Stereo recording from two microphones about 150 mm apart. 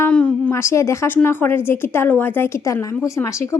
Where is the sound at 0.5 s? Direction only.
20° left (ahead or behind).